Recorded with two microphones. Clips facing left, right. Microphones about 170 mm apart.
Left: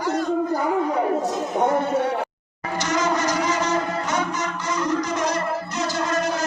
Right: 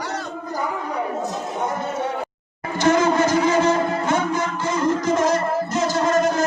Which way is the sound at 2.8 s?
55° right (ahead or behind).